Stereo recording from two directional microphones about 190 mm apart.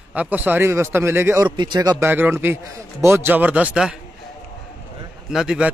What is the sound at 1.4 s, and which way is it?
A man's voice, 25° right (ahead or behind).